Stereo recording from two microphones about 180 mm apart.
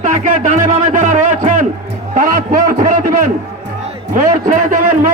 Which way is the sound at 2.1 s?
50° right (ahead or behind).